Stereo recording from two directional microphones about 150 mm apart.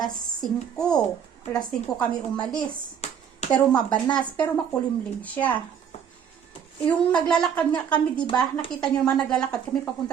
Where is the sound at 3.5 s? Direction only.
5° left (ahead or behind).